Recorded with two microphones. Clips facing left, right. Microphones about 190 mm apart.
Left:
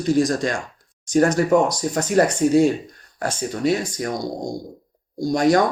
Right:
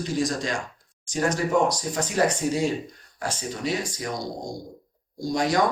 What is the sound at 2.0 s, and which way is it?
Speech, 50° left (ahead or behind).